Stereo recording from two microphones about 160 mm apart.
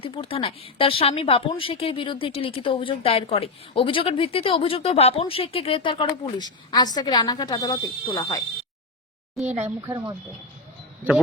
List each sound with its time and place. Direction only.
0.0 s a woman's voice: 35° left (ahead or behind)
9.6 s speech: 15° right (ahead or behind)